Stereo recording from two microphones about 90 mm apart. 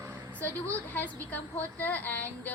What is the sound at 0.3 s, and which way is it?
A woman's voice, 20° left (ahead or behind).